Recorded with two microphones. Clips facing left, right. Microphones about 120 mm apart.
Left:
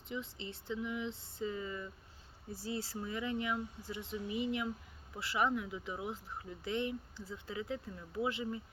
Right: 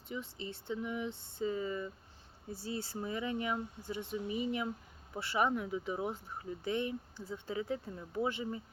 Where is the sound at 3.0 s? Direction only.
25° right (ahead or behind).